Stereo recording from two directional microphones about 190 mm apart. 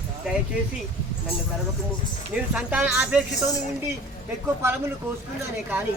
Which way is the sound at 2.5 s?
5° right (ahead or behind).